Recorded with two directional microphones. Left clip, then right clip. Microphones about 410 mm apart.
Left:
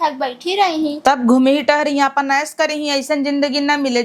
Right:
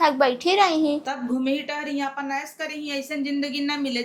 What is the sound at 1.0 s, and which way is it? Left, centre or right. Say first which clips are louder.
A woman's voice: left 14 dB; left.